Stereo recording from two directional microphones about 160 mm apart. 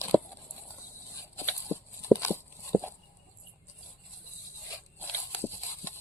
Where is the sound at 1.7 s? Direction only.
5° left (ahead or behind).